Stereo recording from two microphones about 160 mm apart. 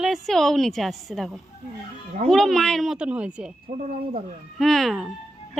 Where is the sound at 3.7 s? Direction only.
45° right (ahead or behind).